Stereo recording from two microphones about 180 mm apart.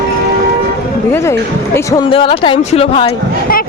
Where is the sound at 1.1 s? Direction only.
15° left (ahead or behind).